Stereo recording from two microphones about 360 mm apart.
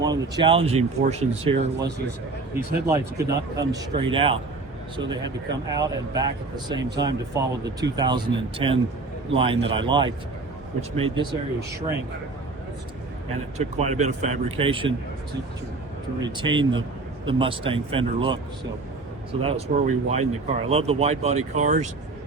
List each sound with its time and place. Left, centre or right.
0.0 s speech: centre
11.1 s speech: centre
13.6 s speech: centre
16.2 s speech: centre